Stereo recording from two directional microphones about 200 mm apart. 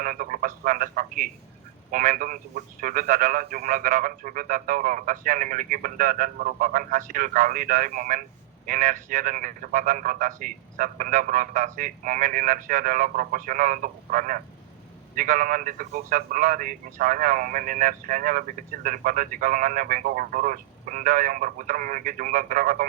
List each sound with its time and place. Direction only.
0.0 s a man's voice: 45° right (ahead or behind)